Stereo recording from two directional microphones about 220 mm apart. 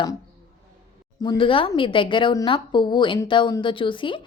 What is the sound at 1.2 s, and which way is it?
Speech, 20° left (ahead or behind).